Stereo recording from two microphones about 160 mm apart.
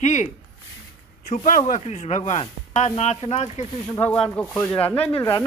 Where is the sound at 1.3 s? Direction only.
55° left (ahead or behind).